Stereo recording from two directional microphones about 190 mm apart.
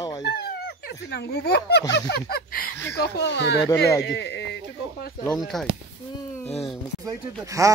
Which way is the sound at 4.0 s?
70° left (ahead or behind).